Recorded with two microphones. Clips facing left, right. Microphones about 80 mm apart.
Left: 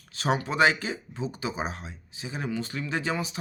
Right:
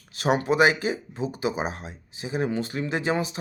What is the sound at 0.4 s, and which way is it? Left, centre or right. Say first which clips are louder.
Speech: right 3 dB; centre.